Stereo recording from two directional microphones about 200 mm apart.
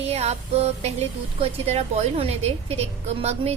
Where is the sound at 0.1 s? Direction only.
30° right (ahead or behind).